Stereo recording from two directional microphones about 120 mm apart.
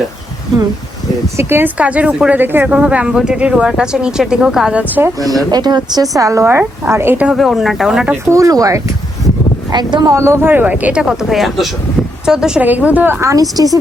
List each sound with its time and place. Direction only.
1.4 s a woman's voice: 20° right (ahead or behind)
5.2 s speech: 30° right (ahead or behind)
7.3 s speech: centre (ahead or behind)
8.1 s a woman's voice: 25° right (ahead or behind)
13.3 s speech: 30° right (ahead or behind)